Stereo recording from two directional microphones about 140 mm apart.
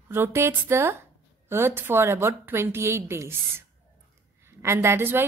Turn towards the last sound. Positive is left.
turn(degrees=-15)  # may be behind; listen again after turning